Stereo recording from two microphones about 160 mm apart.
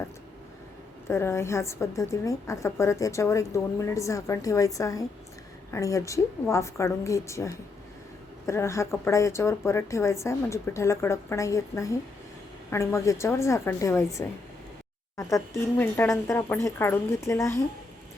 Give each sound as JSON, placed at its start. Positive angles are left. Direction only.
{"t": 1.0, "sound": "a woman's voice", "side_deg": 15}